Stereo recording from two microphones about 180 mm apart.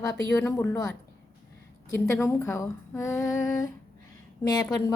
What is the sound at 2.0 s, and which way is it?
A woman's voice, 15° left (ahead or behind).